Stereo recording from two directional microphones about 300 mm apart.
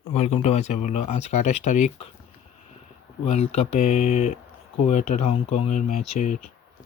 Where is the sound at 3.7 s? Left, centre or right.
Left.